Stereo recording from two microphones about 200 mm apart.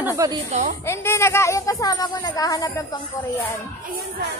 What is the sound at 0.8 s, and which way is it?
A woman's voice, 15° left (ahead or behind).